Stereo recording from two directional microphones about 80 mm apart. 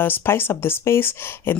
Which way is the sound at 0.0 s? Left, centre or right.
Left.